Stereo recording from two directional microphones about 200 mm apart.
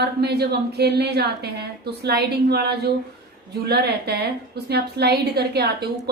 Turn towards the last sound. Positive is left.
turn(degrees=-55)  # may be behind; listen again after turning